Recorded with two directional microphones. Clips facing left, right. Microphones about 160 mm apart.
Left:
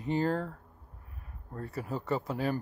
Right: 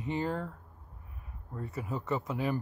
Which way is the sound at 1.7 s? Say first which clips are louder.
Left 1 dB; 35° left (ahead or behind).